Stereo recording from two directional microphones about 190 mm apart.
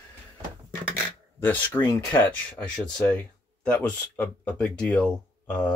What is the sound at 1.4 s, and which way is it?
Speech, 10° left (ahead or behind).